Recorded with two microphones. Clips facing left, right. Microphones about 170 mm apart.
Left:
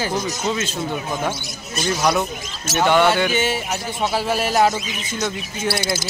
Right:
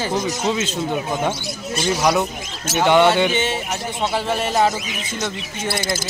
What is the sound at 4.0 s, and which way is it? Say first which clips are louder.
Speech: left 1 dB; 5° left (ahead or behind).